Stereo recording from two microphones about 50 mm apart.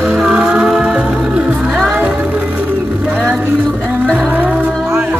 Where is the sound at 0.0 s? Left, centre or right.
Centre.